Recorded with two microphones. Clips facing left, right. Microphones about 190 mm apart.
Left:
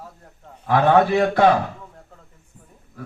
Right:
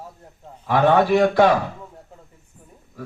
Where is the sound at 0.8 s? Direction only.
55° left (ahead or behind).